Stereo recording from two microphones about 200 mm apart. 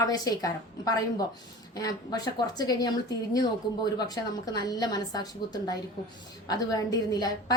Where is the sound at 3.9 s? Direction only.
20° left (ahead or behind).